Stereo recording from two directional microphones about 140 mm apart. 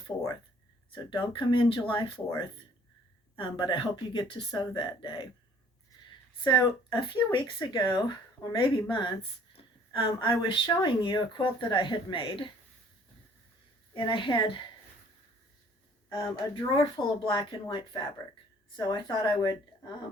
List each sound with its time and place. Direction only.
0.1 s speech: 25° left (ahead or behind)
6.4 s speech: 30° left (ahead or behind)
13.9 s speech: 35° left (ahead or behind)
16.1 s speech: 35° left (ahead or behind)